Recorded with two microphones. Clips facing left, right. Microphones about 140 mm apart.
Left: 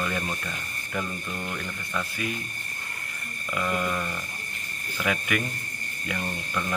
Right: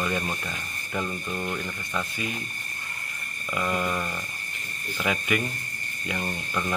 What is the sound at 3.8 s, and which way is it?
Speech, 10° right (ahead or behind).